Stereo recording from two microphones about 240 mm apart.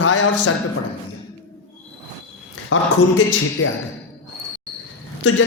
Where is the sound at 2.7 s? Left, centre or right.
Left.